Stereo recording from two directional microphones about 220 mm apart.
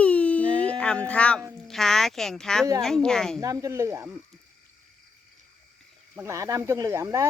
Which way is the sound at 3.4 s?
15° right (ahead or behind).